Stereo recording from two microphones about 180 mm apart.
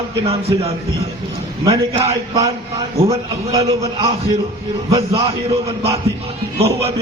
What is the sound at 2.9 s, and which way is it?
Speech, 35° right (ahead or behind).